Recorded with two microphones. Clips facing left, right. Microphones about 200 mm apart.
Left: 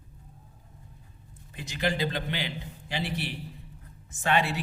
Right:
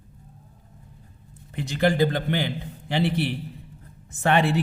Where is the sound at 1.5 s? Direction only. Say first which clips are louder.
Right 8 dB; 60° right (ahead or behind).